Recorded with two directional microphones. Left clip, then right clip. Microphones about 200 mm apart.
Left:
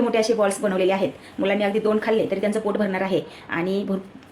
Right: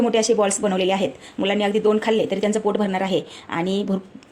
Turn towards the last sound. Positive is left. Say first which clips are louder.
# right 1 dB
turn(degrees=-35)  # may be behind; listen again after turning